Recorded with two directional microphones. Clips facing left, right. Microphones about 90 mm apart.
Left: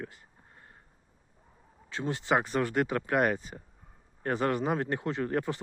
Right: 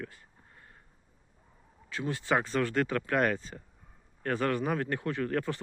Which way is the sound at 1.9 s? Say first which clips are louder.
Left 1 dB; 25° left (ahead or behind).